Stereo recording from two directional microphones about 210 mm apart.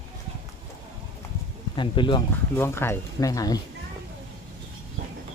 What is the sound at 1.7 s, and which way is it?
Speech, 25° left (ahead or behind).